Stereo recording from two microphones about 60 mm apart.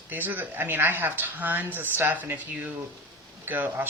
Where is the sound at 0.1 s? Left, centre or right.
Right.